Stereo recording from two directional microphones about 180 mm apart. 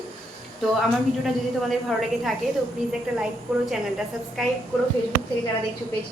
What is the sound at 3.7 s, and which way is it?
Speech, centre (ahead or behind).